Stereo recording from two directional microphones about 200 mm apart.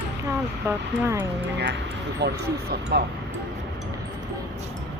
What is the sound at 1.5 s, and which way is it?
Speech, 55° right (ahead or behind).